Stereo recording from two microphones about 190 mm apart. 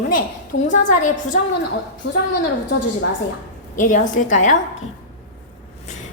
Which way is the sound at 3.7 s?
40° left (ahead or behind).